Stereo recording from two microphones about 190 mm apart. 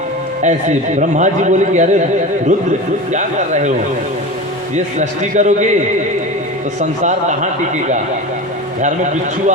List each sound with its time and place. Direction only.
0.4 s speech: 40° right (ahead or behind)
3.1 s speech: 40° right (ahead or behind)
4.7 s speech: 40° right (ahead or behind)
6.7 s speech: 40° right (ahead or behind)